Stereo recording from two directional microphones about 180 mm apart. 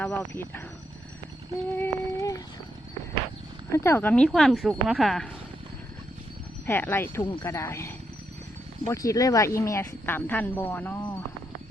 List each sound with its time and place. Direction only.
0.0 s speech: 10° left (ahead or behind)
1.7 s speech: 15° left (ahead or behind)
3.7 s speech: 15° left (ahead or behind)
6.7 s speech: 10° left (ahead or behind)